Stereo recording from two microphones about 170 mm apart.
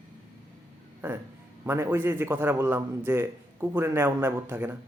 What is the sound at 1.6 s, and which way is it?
A man's voice, 15° right (ahead or behind).